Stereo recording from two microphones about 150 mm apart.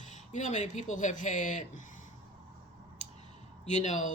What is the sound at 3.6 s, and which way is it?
Speech, 55° left (ahead or behind).